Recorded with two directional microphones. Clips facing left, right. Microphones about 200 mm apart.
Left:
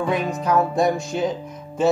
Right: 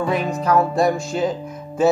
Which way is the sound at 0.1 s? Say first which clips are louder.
Right 2 dB; centre (ahead or behind).